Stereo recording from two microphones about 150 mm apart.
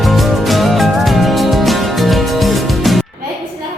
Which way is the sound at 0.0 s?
Centre (ahead or behind).